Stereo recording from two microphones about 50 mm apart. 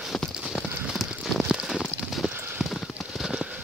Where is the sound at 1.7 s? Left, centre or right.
Centre.